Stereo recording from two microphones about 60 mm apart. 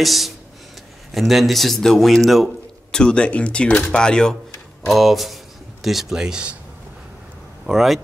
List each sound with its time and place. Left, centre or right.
0.0 s speech: centre
2.9 s speech: centre
4.8 s a man's voice: centre
7.6 s speech: centre